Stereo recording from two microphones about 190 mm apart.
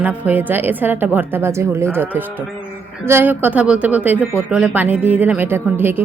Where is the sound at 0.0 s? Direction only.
10° right (ahead or behind).